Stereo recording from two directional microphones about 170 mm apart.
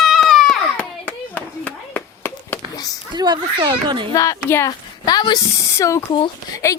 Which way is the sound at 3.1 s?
25° right (ahead or behind).